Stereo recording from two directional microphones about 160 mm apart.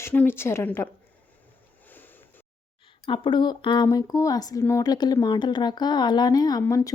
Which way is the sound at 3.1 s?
30° left (ahead or behind).